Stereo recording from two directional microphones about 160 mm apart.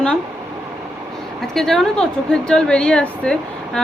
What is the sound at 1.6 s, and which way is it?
Speech, centre (ahead or behind).